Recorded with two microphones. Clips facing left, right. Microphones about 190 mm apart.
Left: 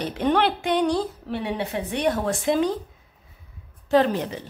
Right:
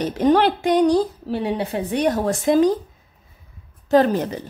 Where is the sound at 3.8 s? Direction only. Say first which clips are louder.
Right 3 dB; 45° right (ahead or behind).